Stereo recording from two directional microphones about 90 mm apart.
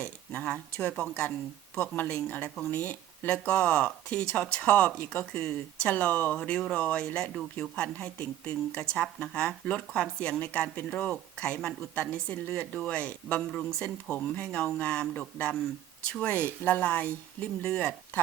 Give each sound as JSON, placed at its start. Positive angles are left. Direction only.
{"t": 0.0, "sound": "a woman's voice", "side_deg": 15}